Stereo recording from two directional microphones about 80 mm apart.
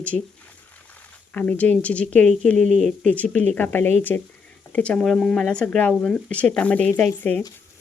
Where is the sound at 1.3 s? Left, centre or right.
Centre.